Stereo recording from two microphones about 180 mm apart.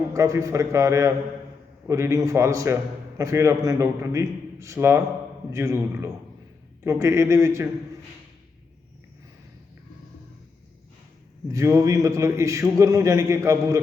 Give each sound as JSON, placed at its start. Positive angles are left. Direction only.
{"t": 0.1, "sound": "a man's voice", "side_deg": -15}
{"t": 11.5, "sound": "a man's voice", "side_deg": -15}